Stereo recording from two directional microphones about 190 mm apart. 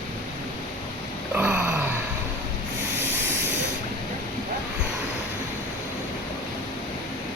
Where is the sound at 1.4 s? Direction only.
10° right (ahead or behind).